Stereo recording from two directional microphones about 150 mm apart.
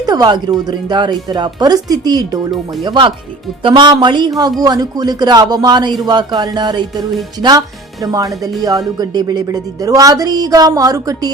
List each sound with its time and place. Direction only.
0.0 s speech: 25° right (ahead or behind)
8.0 s speech: 25° right (ahead or behind)